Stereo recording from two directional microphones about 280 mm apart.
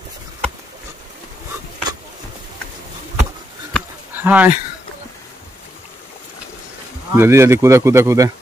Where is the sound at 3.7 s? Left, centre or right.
Centre.